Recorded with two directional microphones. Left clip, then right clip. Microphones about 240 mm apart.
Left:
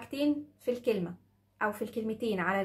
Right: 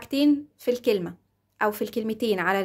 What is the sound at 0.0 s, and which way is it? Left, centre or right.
A woman's voice, right.